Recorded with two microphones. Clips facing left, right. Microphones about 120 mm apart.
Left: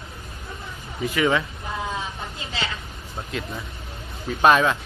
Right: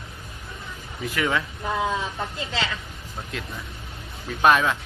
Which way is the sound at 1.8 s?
65° right (ahead or behind).